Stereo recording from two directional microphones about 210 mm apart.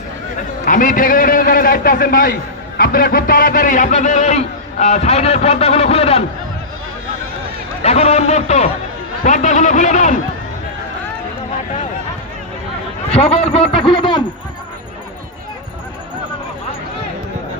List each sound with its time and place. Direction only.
0.6 s a man's voice: 40° left (ahead or behind)
7.8 s a man's voice: 30° left (ahead or behind)
13.1 s a man's voice: 30° left (ahead or behind)